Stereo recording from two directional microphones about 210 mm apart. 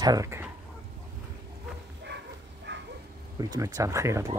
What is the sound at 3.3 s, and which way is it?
Speech, 20° right (ahead or behind).